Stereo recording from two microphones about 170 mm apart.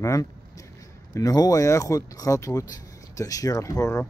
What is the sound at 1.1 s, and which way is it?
Speech, 20° left (ahead or behind).